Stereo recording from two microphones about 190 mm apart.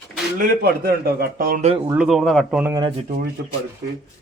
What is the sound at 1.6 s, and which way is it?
Speech, 25° right (ahead or behind).